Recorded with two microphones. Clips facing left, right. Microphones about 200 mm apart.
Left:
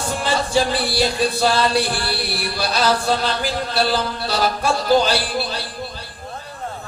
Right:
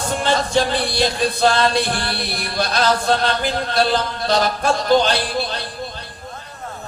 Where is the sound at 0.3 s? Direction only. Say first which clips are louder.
Right 1 dB; 10° left (ahead or behind).